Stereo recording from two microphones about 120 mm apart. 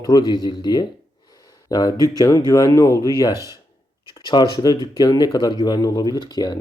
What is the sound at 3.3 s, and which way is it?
Speech, 25° right (ahead or behind).